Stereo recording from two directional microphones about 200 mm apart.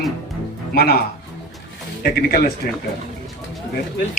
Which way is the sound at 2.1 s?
50° left (ahead or behind).